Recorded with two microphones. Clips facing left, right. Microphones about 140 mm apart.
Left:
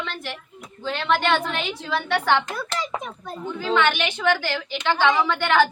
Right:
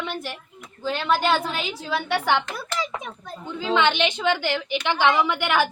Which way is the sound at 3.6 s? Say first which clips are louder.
Right 1 dB; 20° right (ahead or behind).